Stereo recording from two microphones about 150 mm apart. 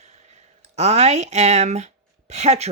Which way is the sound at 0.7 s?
45° right (ahead or behind).